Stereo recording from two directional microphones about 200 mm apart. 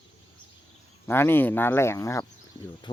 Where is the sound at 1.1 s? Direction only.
10° left (ahead or behind).